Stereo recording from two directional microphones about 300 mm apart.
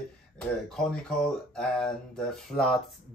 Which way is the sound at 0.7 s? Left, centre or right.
Centre.